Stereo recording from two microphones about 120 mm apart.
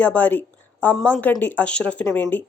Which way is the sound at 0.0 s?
10° left (ahead or behind).